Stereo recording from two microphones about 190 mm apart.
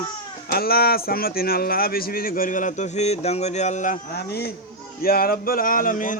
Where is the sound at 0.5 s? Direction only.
55° left (ahead or behind); by 3.9 s 40° left (ahead or behind).